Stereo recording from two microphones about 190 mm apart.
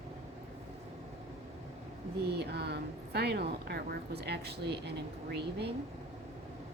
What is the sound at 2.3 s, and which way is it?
Speech, 60° right (ahead or behind).